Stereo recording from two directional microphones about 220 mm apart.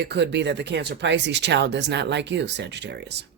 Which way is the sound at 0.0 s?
50° right (ahead or behind).